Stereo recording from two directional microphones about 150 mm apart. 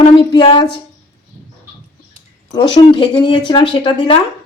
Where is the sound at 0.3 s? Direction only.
35° left (ahead or behind).